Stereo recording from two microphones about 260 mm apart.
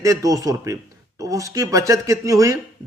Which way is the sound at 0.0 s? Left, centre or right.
Centre.